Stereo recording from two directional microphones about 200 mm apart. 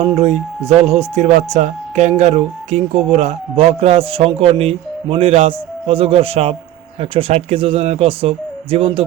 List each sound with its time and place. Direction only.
0.0 s speech: 30° right (ahead or behind)